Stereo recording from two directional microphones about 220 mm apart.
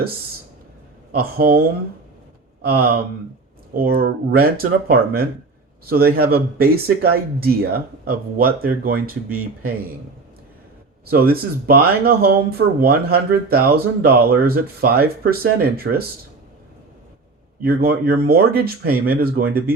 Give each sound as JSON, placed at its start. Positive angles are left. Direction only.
{"t": 1.1, "sound": "speech", "side_deg": -40}
{"t": 11.0, "sound": "speech", "side_deg": -45}
{"t": 17.6, "sound": "speech", "side_deg": -45}